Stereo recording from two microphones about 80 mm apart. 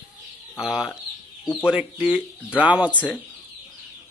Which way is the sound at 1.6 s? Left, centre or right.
Centre.